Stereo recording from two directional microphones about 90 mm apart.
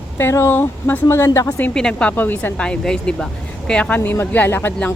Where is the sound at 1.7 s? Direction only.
5° left (ahead or behind).